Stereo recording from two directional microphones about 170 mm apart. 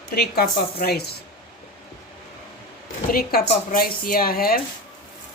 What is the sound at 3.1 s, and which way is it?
Speech, 60° left (ahead or behind).